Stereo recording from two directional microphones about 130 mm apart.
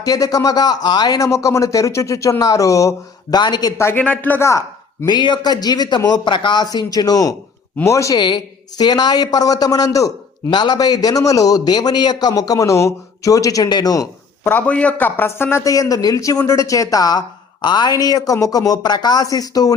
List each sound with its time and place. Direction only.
0.0 s speech: 30° left (ahead or behind)
3.8 s a man's voice: 15° left (ahead or behind)
5.0 s a man's voice: 35° left (ahead or behind)
14.4 s a man's voice: 10° left (ahead or behind); by 19.7 s 30° left (ahead or behind)